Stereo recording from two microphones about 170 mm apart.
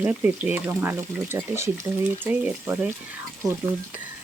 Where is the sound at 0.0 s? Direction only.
10° right (ahead or behind).